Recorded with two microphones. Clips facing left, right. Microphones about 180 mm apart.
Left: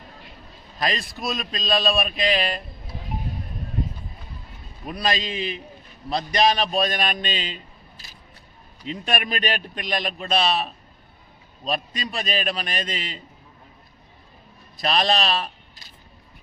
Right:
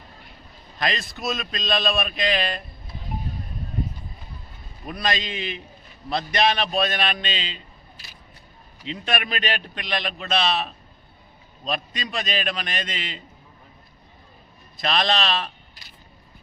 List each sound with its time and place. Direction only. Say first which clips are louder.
0.8 s a man's voice: left 1 dB; 35° left (ahead or behind)
4.9 s a man's voice: left 2 dB; 35° left (ahead or behind)
8.9 s a man's voice: left 1 dB; 40° left (ahead or behind)
11.7 s a man's voice: left 1 dB; 35° left (ahead or behind)
14.8 s a man's voice: left 1 dB; 35° left (ahead or behind)